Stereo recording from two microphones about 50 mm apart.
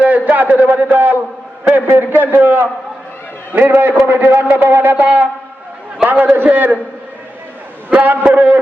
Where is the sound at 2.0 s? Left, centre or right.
Right.